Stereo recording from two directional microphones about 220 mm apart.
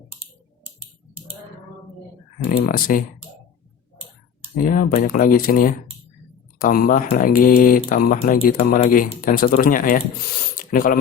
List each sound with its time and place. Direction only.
0.1 s typing: 25° right (ahead or behind)
2.6 s speech: 40° left (ahead or behind)
4.5 s speech: 40° left (ahead or behind)
10.5 s a sound: 40° left (ahead or behind)